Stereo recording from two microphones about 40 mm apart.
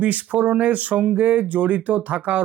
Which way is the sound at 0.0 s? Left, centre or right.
Right.